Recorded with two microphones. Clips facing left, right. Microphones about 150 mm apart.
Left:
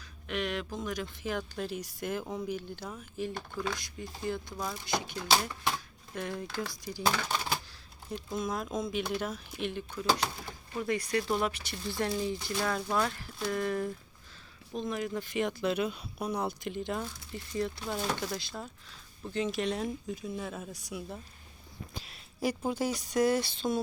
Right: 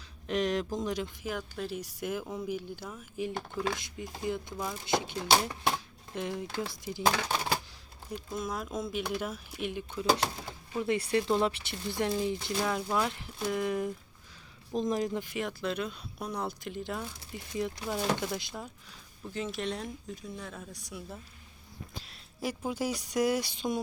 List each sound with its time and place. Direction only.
0.3 s speech: 35° right (ahead or behind)
1.0 s speech: 5° right (ahead or behind)
3.2 s speech: 20° right (ahead or behind)
4.5 s speech: 5° right (ahead or behind)
4.9 s speech: 25° right (ahead or behind)
8.4 s speech: 5° right (ahead or behind)
10.8 s speech: 25° right (ahead or behind)
14.7 s speech: 35° right (ahead or behind)
15.1 s speech: 15° right (ahead or behind)
15.4 s speech: centre (ahead or behind)
17.3 s speech: 15° right (ahead or behind)
19.3 s speech: centre (ahead or behind)